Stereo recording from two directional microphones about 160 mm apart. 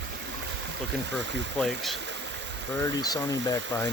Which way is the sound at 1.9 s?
90° right.